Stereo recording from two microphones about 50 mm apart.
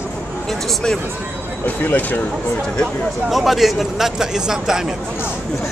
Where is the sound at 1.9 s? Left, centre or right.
Left.